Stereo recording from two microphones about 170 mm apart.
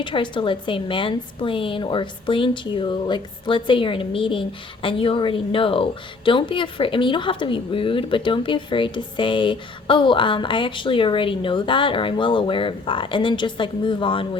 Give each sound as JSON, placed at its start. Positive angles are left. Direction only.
{"t": 0.0, "sound": "speech", "side_deg": 30}